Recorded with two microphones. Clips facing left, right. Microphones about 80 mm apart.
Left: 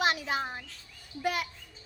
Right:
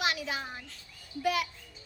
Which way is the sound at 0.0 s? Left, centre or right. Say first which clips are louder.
Left 4 dB; left.